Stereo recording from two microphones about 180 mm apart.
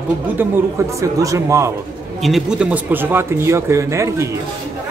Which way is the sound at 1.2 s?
15° right (ahead or behind).